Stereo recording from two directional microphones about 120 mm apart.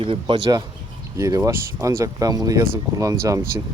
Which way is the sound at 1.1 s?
25° right (ahead or behind).